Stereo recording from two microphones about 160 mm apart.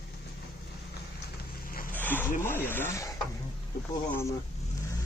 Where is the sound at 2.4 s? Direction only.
15° left (ahead or behind).